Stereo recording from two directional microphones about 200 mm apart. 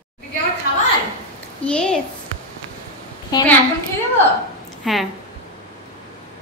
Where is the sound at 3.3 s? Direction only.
20° left (ahead or behind).